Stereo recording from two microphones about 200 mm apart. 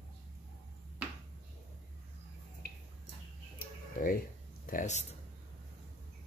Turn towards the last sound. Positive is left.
turn(degrees=40)  # may be behind; listen again after turning